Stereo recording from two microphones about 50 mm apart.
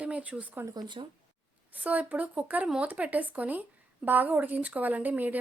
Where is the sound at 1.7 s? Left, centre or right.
Right.